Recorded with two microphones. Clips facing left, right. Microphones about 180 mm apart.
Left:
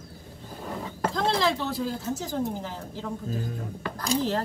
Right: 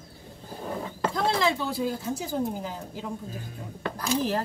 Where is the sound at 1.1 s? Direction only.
10° right (ahead or behind).